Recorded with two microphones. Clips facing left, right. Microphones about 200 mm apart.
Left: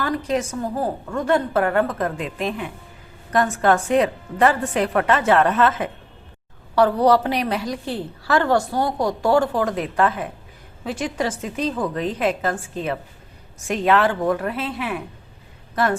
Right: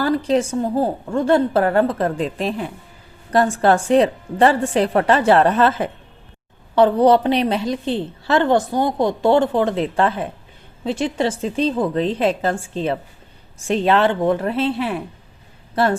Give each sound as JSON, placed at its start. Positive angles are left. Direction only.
{"t": 0.0, "sound": "a woman's voice", "side_deg": -30}
{"t": 6.7, "sound": "a woman's voice", "side_deg": -20}